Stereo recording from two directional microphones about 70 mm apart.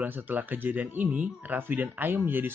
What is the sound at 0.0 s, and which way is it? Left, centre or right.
Speech, right.